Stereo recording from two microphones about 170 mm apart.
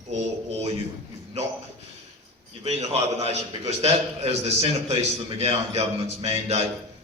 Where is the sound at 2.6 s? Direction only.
40° right (ahead or behind).